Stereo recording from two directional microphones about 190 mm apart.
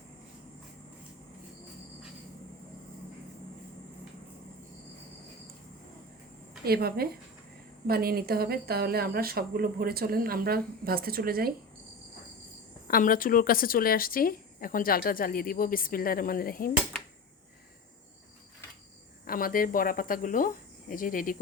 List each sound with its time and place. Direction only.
6.7 s speech: 55° right (ahead or behind)
12.9 s speech: 45° left (ahead or behind)
19.2 s speech: 50° left (ahead or behind)